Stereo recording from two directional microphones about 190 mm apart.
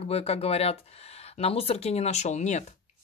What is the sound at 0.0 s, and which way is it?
Speech, 35° left (ahead or behind).